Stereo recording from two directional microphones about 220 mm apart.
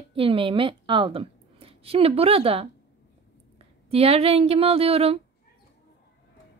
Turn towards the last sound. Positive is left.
turn(degrees=-25)  # may be behind; listen again after turning